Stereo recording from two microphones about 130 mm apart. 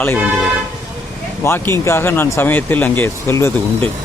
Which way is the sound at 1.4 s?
20° left (ahead or behind).